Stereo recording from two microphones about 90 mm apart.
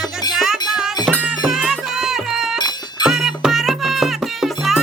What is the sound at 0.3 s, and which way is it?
Music, 5° right (ahead or behind).